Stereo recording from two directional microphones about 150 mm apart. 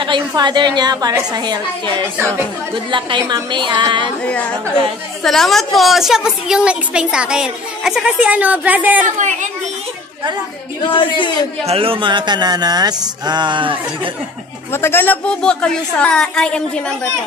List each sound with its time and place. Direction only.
0.0 s a woman's voice: 30° right (ahead or behind)
2.1 s a woman's voice: 15° right (ahead or behind)
3.3 s speech: 30° right (ahead or behind)
4.2 s a woman's voice: 10° left (ahead or behind); by 9.0 s 10° right (ahead or behind)
9.0 s speech: 55° right (ahead or behind)
10.9 s a man's voice: 30° left (ahead or behind)
11.6 s speech: 40° right (ahead or behind)
14.7 s a woman's voice: 15° left (ahead or behind)